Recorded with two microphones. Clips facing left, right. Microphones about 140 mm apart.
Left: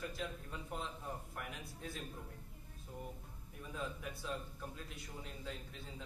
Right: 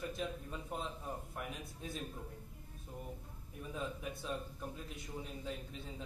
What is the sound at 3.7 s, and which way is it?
A man's voice, 20° right (ahead or behind).